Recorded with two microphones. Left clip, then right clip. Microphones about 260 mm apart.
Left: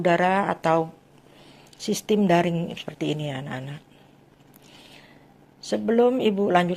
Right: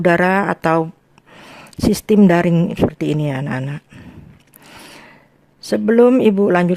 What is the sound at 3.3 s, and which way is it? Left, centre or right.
Speech, right.